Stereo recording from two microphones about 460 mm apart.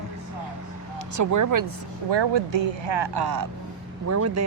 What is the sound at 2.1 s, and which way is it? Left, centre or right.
Speech, right.